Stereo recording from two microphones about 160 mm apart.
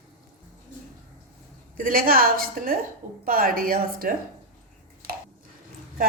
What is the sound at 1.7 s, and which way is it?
A woman's voice, 65° right (ahead or behind).